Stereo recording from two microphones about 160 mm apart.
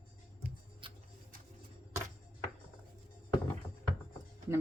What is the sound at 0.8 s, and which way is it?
Music, 30° right (ahead or behind).